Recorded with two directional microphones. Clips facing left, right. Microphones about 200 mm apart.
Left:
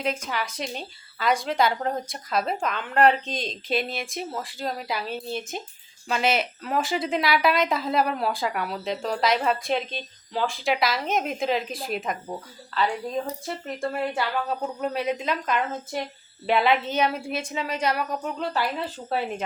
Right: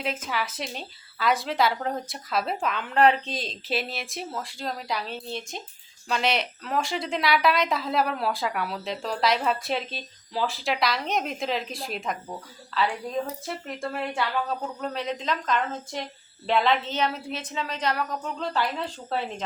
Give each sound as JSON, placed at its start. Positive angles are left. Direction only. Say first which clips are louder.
{"t": 0.0, "sound": "a woman's voice", "louder": "left 2 dB", "side_deg": -5}